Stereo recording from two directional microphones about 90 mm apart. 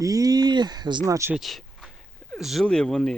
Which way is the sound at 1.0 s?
35° right (ahead or behind).